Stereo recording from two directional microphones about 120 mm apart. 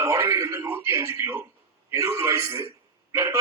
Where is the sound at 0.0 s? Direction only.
25° right (ahead or behind).